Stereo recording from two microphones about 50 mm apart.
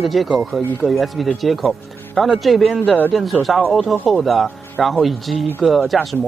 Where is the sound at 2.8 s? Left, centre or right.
Left.